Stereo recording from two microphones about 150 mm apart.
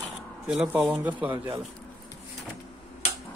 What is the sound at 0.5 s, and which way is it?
Speech, 10° right (ahead or behind).